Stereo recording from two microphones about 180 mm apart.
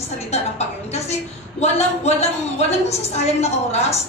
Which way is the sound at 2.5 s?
35° left (ahead or behind).